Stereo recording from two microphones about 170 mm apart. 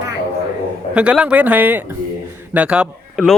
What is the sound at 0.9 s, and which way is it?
Speech, 5° right (ahead or behind).